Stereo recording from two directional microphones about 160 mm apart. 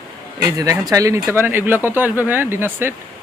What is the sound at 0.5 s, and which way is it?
Speech, 20° right (ahead or behind).